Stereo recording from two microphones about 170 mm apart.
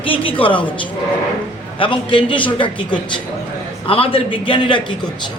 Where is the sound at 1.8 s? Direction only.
30° left (ahead or behind).